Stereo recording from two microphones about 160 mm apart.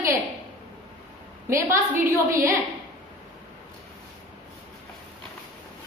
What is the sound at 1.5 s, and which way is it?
A woman's voice, 20° right (ahead or behind).